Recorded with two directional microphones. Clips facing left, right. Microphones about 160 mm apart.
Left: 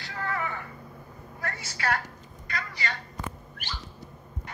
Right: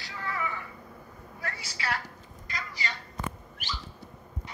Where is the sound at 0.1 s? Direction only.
55° left (ahead or behind).